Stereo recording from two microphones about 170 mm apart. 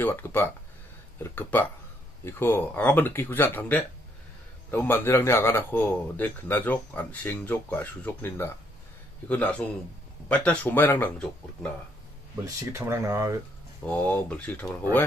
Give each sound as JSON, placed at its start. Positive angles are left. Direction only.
{"t": 0.0, "sound": "speech", "side_deg": 10}
{"t": 12.4, "sound": "speech", "side_deg": -15}
{"t": 13.8, "sound": "speech", "side_deg": 10}